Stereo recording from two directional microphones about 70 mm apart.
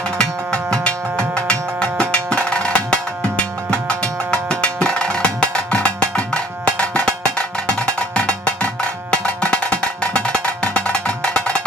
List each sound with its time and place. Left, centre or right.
0.2 s music: centre
7.9 s cowbell: centre